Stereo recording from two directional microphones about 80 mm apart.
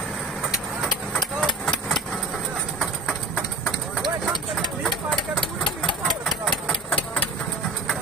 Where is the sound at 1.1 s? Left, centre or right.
Centre.